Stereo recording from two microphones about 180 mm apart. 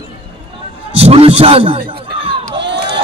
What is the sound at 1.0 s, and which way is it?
Speech, 35° right (ahead or behind).